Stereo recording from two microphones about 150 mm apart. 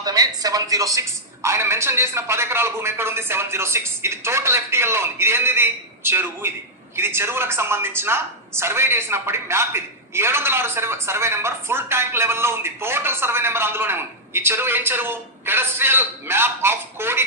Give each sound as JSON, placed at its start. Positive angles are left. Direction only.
{"t": 0.0, "sound": "a woman's voice", "side_deg": -25}